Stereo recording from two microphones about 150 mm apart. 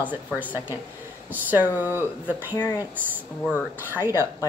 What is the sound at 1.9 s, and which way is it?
Speech, 15° right (ahead or behind).